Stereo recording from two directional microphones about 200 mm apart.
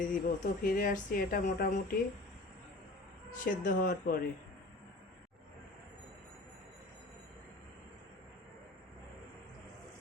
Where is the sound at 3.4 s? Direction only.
45° left (ahead or behind).